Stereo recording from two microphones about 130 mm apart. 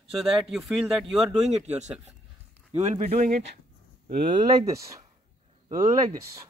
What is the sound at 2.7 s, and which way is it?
Speech, 70° right (ahead or behind).